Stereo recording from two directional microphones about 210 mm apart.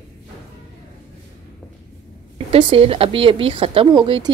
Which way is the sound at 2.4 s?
25° right (ahead or behind).